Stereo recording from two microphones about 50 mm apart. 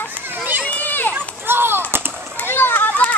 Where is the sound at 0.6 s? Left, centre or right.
Left.